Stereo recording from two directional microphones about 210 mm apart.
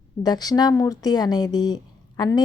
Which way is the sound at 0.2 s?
20° left (ahead or behind).